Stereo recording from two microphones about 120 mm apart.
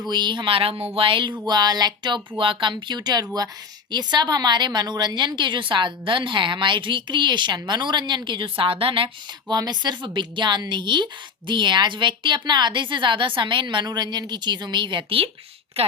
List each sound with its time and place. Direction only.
0.1 s speech: 40° right (ahead or behind)
1.5 s a woman's voice: 35° right (ahead or behind)
9.5 s a woman's voice: 35° right (ahead or behind)